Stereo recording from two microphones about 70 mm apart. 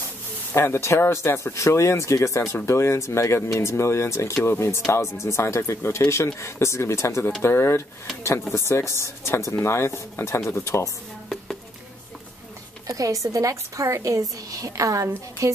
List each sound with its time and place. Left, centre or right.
0.5 s speech: left
12.8 s a woman's voice: right